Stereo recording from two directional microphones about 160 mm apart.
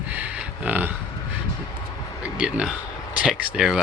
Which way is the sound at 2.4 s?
5° right (ahead or behind).